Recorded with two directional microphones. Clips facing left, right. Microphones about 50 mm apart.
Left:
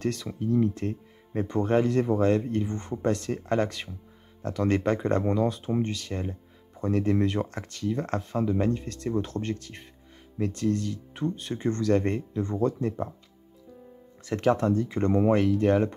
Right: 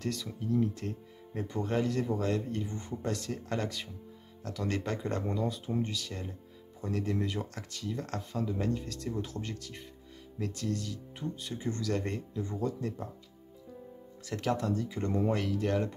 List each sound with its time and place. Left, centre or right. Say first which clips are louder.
0.0 s speech: left 6 dB; left
2.7 s speech: left 8 dB; left
5.2 s speech: left 8 dB; left
12.4 s speech: left 7 dB; left
14.3 s speech: left 8 dB; left
15.3 s speech: left 8 dB; left